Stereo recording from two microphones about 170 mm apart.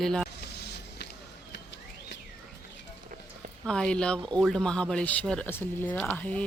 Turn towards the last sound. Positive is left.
turn(degrees=10)  # may be behind; listen again after turning